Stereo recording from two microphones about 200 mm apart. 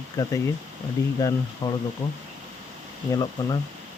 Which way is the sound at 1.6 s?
20° left (ahead or behind).